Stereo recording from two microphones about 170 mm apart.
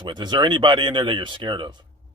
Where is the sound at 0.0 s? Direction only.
25° right (ahead or behind).